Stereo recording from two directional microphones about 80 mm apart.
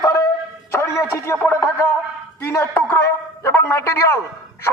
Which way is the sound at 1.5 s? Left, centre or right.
Left.